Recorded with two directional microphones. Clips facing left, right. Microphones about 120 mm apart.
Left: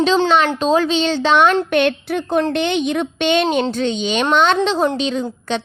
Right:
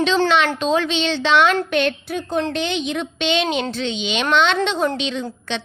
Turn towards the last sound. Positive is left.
turn(degrees=40)  # may be behind; listen again after turning